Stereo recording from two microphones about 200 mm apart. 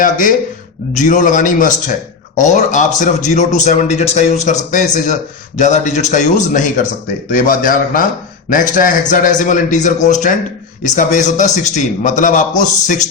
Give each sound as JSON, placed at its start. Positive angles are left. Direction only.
{"t": 0.0, "sound": "a man's voice", "side_deg": 45}